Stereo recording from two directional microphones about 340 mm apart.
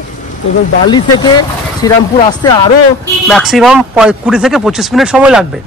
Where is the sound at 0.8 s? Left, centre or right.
Centre.